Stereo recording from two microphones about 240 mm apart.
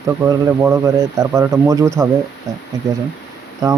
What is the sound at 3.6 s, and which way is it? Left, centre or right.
Speech, centre.